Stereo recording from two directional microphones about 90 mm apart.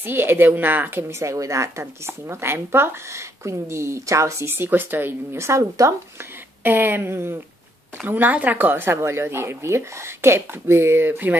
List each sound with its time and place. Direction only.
0.0 s speech: 25° right (ahead or behind)